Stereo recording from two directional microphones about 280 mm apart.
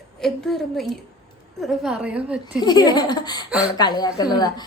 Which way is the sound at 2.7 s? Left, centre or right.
Centre.